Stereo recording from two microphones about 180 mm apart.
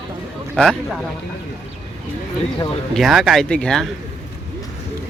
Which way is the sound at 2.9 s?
Centre (ahead or behind).